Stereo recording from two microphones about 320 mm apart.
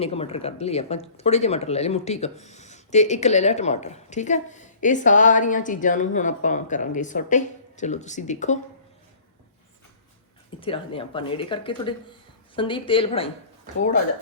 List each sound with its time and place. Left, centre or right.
0.0 s speech: centre
10.6 s speech: centre